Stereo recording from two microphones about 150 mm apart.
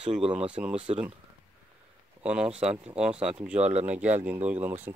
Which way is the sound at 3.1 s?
40° right (ahead or behind).